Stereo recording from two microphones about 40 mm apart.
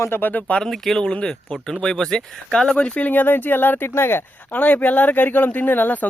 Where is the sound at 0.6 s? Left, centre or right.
Centre.